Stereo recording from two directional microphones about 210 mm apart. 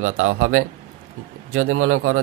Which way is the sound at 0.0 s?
75° right (ahead or behind).